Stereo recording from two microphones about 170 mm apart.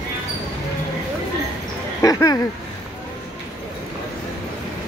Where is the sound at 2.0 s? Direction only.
20° left (ahead or behind).